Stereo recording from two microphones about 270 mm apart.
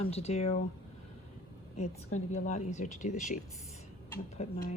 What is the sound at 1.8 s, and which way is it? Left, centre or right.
Speech, left.